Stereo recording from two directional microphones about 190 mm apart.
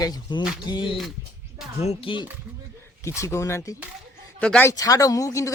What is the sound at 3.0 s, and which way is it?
Speech, 15° left (ahead or behind).